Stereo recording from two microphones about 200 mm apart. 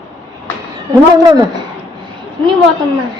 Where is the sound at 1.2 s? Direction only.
20° right (ahead or behind).